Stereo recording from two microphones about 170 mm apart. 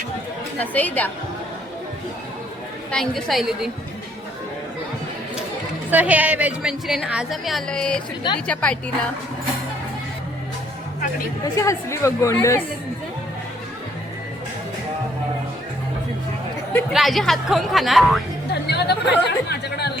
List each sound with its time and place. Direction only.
0.6 s a woman's voice: 10° left (ahead or behind)
2.9 s a woman's voice: 5° left (ahead or behind)
5.9 s a woman's voice: 10° right (ahead or behind); by 8.8 s 5° left (ahead or behind)
11.4 s a woman's voice: 20° left (ahead or behind)
16.9 s a woman's voice: centre (ahead or behind)
18.5 s chatter: 75° left (ahead or behind)